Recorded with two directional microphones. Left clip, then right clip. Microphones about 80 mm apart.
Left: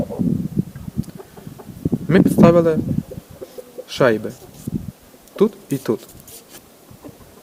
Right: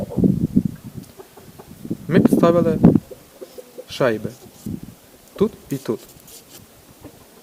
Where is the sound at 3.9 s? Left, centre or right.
Centre.